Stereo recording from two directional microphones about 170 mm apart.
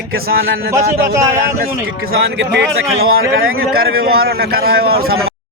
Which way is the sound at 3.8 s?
65° right (ahead or behind).